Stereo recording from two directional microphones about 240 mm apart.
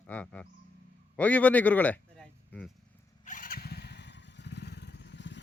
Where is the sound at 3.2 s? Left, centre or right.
Left.